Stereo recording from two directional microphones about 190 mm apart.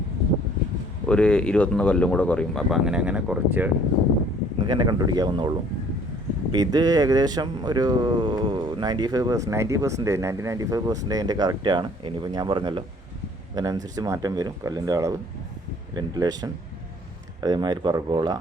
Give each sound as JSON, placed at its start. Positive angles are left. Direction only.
{"t": 1.0, "sound": "speech", "side_deg": 5}
{"t": 4.6, "sound": "speech", "side_deg": -25}